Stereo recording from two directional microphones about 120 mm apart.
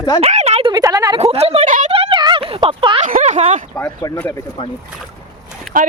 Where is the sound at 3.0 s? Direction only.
80° right.